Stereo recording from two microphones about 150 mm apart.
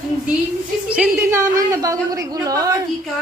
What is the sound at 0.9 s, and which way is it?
Speech, 15° right (ahead or behind).